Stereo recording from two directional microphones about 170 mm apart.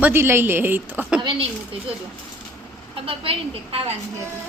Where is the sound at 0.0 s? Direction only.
15° right (ahead or behind).